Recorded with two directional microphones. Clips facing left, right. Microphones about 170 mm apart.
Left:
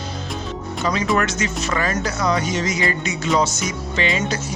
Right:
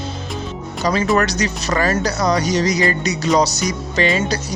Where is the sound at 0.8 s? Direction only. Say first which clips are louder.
Right 4 dB; 35° right (ahead or behind).